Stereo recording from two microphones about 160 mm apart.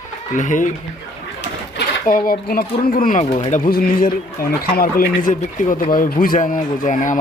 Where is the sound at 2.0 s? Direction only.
60° left (ahead or behind).